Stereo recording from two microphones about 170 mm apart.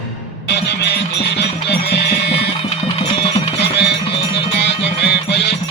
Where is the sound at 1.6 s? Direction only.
85° left.